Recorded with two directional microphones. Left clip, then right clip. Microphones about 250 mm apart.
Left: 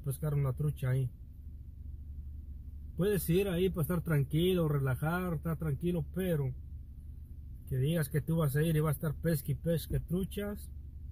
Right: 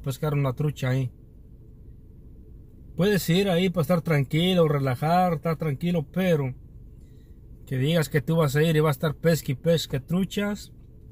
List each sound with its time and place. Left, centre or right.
0.3 s speech: centre
3.0 s speech: centre
7.7 s speech: centre